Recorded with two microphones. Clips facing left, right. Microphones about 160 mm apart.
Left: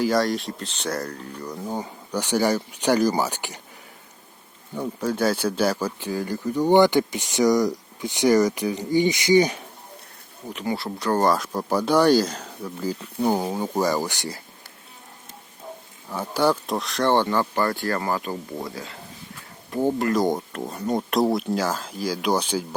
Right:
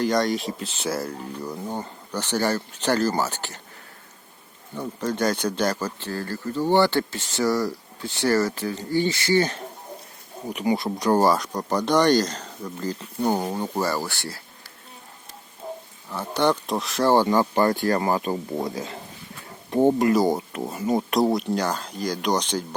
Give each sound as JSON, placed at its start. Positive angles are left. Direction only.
{"t": 0.0, "sound": "speech", "side_deg": 0}
{"t": 1.7, "sound": "speech", "side_deg": 10}
{"t": 4.8, "sound": "speech", "side_deg": 10}
{"t": 10.5, "sound": "speech", "side_deg": -15}
{"t": 11.3, "sound": "speech", "side_deg": 5}
{"t": 15.6, "sound": "wild animals", "side_deg": -30}
{"t": 16.0, "sound": "speech", "side_deg": 10}
{"t": 20.1, "sound": "speech", "side_deg": -5}